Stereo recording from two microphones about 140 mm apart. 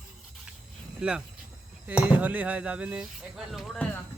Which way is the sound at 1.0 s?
5° right (ahead or behind).